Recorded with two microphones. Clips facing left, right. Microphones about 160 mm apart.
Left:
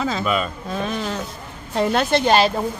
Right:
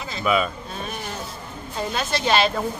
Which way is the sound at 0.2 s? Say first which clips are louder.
Right 1 dB; 5° right (ahead or behind).